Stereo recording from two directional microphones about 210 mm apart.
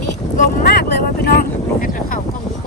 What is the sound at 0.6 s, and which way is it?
Vehicle, 50° left (ahead or behind).